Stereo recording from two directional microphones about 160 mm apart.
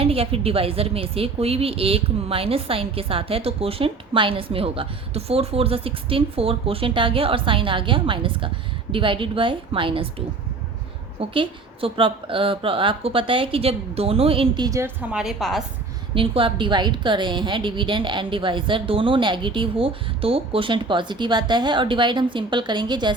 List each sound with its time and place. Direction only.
0.0 s a woman's voice: 35° right (ahead or behind); by 14.9 s 20° right (ahead or behind)
15.1 s a woman's voice: 5° right (ahead or behind)
16.1 s a woman's voice: 35° right (ahead or behind)